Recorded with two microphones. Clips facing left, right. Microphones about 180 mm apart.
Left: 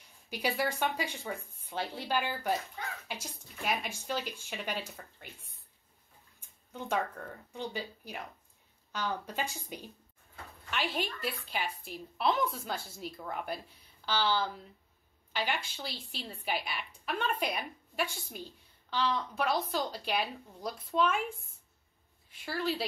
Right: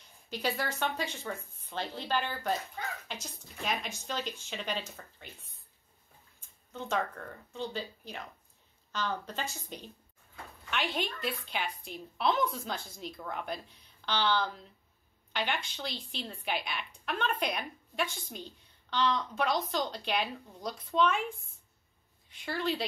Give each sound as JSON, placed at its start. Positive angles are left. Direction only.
{"t": 0.3, "sound": "speech", "side_deg": 10}
{"t": 6.7, "sound": "a woman's voice", "side_deg": 10}
{"t": 22.3, "sound": "a woman's voice", "side_deg": 5}